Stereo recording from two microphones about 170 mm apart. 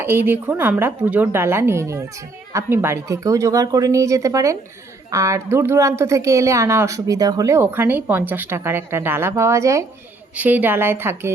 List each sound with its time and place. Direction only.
0.0 s speech: 10° right (ahead or behind)